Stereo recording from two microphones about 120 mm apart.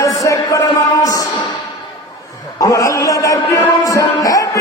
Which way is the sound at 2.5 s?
30° left (ahead or behind).